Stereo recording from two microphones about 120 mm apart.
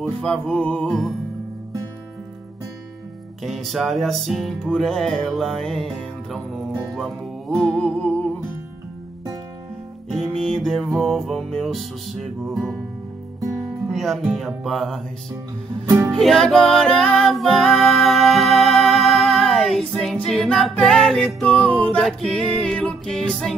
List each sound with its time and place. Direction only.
0.0 s music: 5° left (ahead or behind)
3.4 s music: centre (ahead or behind)
10.2 s music: 5° left (ahead or behind)
13.4 s music: 25° right (ahead or behind)
13.8 s music: centre (ahead or behind)
16.1 s music: centre (ahead or behind)